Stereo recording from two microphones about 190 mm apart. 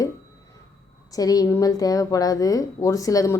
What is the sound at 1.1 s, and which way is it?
A woman's voice, 20° left (ahead or behind).